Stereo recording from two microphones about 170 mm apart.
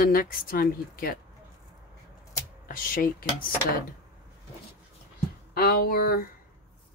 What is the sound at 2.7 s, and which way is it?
Speech, 55° left (ahead or behind).